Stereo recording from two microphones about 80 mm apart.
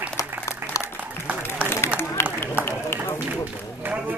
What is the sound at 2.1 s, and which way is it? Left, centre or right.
Run, left.